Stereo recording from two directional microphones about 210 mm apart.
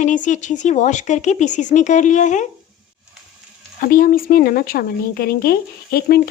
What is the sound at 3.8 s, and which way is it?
Speech, 40° left (ahead or behind).